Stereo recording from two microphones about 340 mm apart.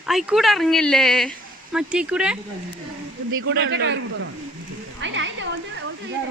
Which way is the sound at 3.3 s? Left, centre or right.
Right.